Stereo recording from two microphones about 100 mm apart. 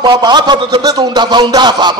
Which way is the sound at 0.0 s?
45° right (ahead or behind).